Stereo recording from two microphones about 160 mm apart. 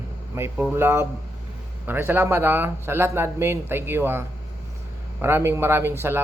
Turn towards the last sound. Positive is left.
turn(degrees=-15)  # may be behind; listen again after turning